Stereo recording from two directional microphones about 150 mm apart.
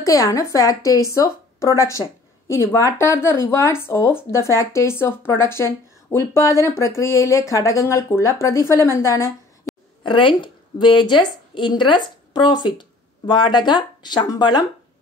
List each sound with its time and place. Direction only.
0.0 s a woman's voice: 20° left (ahead or behind)
10.0 s a woman's voice: 35° left (ahead or behind)